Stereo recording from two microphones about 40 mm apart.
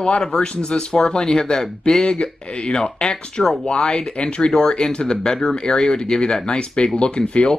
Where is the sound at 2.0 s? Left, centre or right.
Left.